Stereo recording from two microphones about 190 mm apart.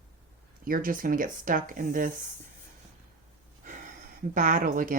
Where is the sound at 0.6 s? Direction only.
50° right (ahead or behind).